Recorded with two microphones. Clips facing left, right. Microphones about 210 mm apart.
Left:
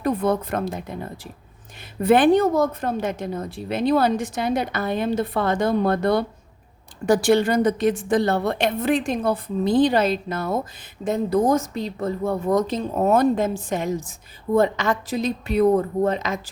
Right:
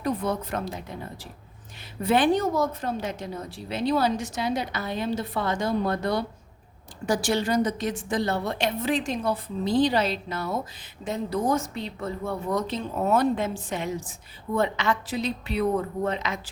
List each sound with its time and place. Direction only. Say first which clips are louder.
0.0 s a woman's voice: left 6 dB; 55° left (ahead or behind)